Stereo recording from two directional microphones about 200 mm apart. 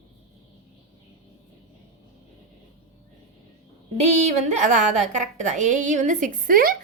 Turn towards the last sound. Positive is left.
turn(degrees=-45)  # may be behind; listen again after turning